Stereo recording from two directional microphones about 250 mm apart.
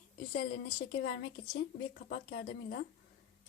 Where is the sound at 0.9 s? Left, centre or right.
Left.